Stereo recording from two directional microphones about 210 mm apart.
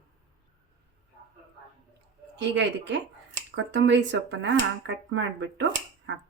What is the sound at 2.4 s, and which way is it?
Speech, 55° right (ahead or behind).